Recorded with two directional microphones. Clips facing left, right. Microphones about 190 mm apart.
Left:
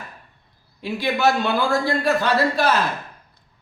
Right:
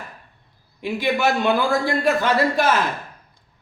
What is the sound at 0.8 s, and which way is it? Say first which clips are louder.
Speech: right 1 dB; 15° right (ahead or behind).